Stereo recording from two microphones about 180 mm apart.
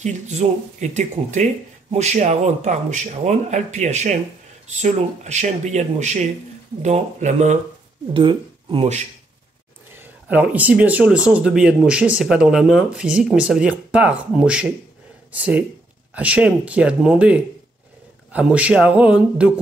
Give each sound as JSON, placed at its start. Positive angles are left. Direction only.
{"t": 0.0, "sound": "speech", "side_deg": -40}
{"t": 8.1, "sound": "speech", "side_deg": -25}
{"t": 10.2, "sound": "speech", "side_deg": -10}